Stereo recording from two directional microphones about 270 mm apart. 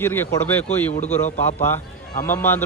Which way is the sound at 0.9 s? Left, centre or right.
Left.